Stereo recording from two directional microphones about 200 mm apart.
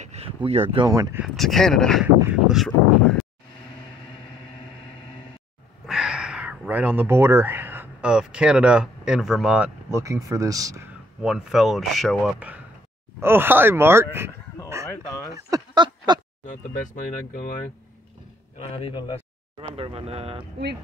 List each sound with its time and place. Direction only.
0.0 s speech: 30° right (ahead or behind)
1.2 s speech: centre (ahead or behind)
5.9 s speech: 5° right (ahead or behind)
11.2 s speech: centre (ahead or behind)
15.3 s speech: 20° right (ahead or behind)
16.4 s speech: 40° left (ahead or behind)
18.7 s a man's voice: 30° left (ahead or behind)
19.8 s speech: 30° right (ahead or behind)